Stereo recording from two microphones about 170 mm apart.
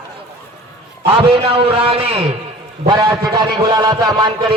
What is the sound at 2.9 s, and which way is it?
A man's voice, 25° right (ahead or behind).